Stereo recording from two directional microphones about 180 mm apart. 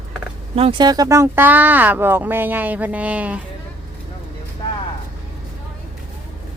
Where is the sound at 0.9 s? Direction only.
20° right (ahead or behind).